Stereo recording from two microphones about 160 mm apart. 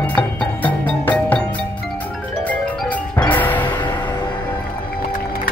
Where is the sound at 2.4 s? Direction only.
10° left (ahead or behind).